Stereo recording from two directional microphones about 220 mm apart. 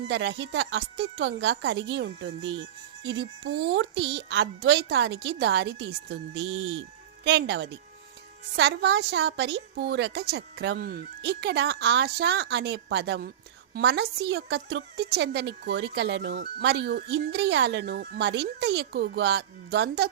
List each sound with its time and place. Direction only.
0.1 s a woman's voice: 50° right (ahead or behind)